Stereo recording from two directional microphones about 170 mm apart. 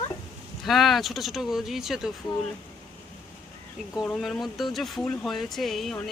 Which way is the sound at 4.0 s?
Centre (ahead or behind).